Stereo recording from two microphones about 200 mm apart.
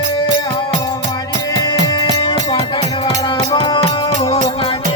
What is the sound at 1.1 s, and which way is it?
Music, 20° left (ahead or behind).